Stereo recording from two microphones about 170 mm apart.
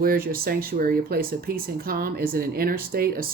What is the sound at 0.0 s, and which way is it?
Speech, 60° right (ahead or behind).